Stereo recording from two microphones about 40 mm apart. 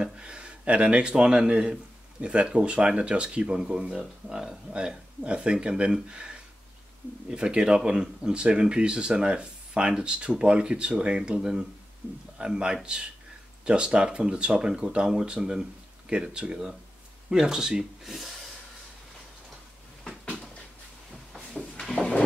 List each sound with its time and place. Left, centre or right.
0.0 s speech: right